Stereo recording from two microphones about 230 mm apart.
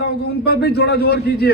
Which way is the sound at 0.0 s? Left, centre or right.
Left.